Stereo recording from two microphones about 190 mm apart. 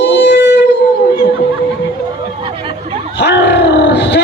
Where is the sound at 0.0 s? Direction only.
65° left (ahead or behind).